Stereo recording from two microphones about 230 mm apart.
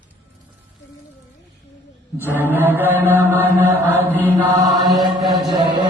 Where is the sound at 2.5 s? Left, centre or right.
Centre.